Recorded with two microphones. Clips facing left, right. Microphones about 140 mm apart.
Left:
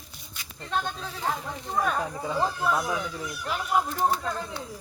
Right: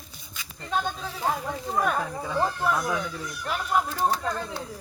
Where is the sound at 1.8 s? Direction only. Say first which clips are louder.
Right 1 dB; centre (ahead or behind).